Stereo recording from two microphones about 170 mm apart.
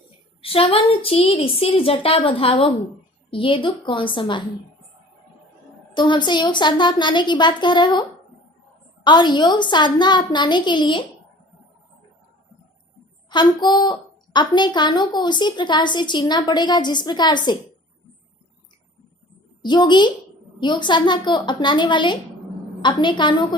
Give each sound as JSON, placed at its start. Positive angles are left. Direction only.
{"t": 0.4, "sound": "a woman's voice", "side_deg": 35}
{"t": 5.9, "sound": "a woman's voice", "side_deg": 25}
{"t": 9.0, "sound": "a woman's voice", "side_deg": 25}
{"t": 13.3, "sound": "a woman's voice", "side_deg": 25}
{"t": 19.6, "sound": "a woman's voice", "side_deg": 25}